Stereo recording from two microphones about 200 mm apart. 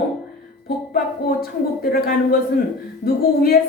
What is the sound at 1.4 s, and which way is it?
A woman's voice, 50° left (ahead or behind).